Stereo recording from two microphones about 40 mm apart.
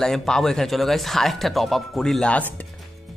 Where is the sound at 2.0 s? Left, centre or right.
Centre.